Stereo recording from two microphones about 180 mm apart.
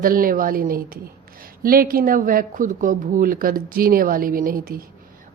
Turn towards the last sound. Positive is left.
turn(degrees=-55)  # may be behind; listen again after turning